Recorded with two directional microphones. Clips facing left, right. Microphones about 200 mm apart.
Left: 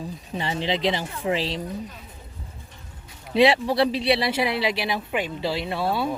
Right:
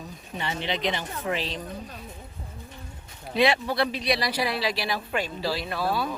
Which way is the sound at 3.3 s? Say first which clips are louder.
Left 5 dB; 30° left (ahead or behind).